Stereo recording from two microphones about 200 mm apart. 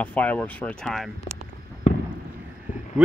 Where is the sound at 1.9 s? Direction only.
35° left (ahead or behind).